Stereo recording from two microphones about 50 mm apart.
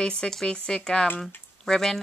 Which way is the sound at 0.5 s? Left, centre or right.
Centre.